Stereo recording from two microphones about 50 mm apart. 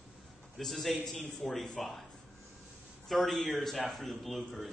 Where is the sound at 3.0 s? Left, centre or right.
Centre.